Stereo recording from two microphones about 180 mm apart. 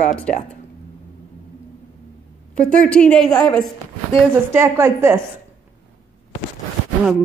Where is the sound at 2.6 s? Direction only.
5° left (ahead or behind).